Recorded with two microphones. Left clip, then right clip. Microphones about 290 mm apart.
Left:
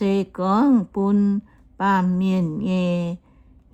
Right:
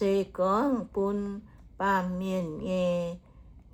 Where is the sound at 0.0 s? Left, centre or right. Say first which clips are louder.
Left 3 dB; left.